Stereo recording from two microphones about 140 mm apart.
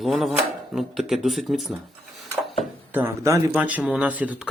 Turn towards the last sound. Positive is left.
turn(degrees=-10)  # may be behind; listen again after turning